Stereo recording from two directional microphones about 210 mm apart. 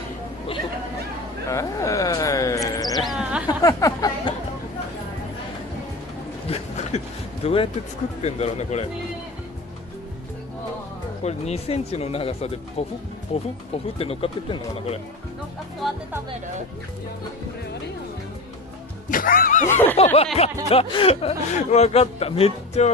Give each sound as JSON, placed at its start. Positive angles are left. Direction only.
{"t": 1.5, "sound": "music", "side_deg": 15}
{"t": 3.1, "sound": "a sound", "side_deg": -5}
{"t": 3.4, "sound": "a sound", "side_deg": 15}
{"t": 6.5, "sound": "a sound", "side_deg": 30}
{"t": 7.4, "sound": "speech", "side_deg": 25}
{"t": 11.2, "sound": "speech", "side_deg": 30}
{"t": 15.8, "sound": "speech", "side_deg": 0}
{"t": 19.0, "sound": "music", "side_deg": 40}
{"t": 19.7, "sound": "speech", "side_deg": 10}
{"t": 20.4, "sound": "speech", "side_deg": 30}